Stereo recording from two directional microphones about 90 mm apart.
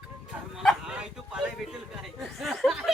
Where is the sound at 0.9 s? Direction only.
10° right (ahead or behind).